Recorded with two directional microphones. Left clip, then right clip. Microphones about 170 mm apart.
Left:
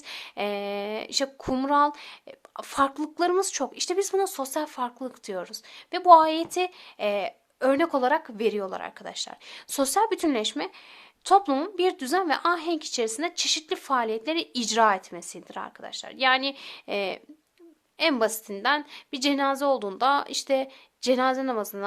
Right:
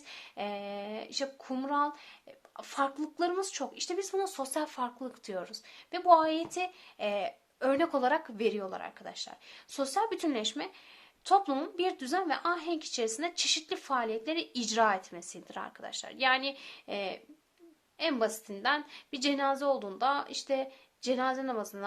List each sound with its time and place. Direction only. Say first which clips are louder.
0.1 s a woman's voice: left 8 dB; 35° left (ahead or behind)